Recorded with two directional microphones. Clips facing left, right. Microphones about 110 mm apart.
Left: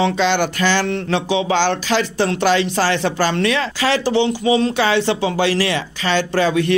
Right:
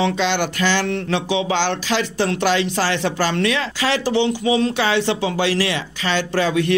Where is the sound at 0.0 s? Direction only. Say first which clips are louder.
Left 3 dB; 40° left (ahead or behind).